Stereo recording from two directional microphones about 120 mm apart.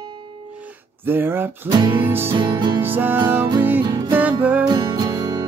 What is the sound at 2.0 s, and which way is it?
Music, 20° right (ahead or behind).